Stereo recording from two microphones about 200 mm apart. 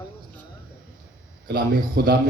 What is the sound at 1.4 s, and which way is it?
Speech, 50° right (ahead or behind).